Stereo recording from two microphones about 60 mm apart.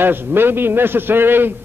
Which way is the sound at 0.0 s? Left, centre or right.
Right.